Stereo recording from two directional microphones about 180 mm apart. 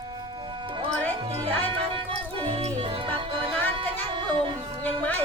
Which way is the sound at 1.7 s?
30° right (ahead or behind).